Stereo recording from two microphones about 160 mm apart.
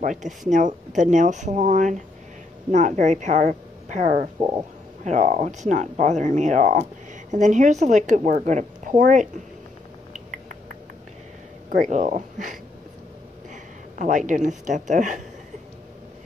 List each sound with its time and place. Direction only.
0.0 s speech: 55° right (ahead or behind)
11.7 s speech: 50° right (ahead or behind)
13.9 s speech: 50° right (ahead or behind)